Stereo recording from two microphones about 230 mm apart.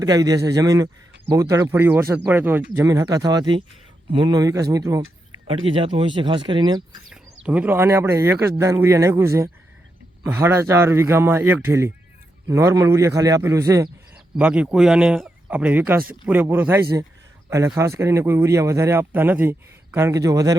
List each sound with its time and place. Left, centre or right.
0.0 s speech: centre
7.4 s speech: centre